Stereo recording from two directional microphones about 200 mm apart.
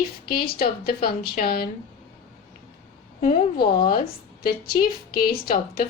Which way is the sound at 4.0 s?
50° left (ahead or behind).